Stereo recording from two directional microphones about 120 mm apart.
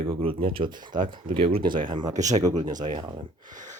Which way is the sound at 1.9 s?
35° right (ahead or behind).